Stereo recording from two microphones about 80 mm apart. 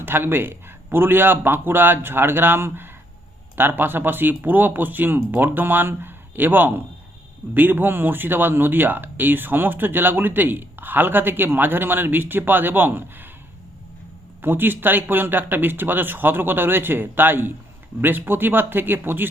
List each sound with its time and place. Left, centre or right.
0.0 s speech: right
14.4 s speech: right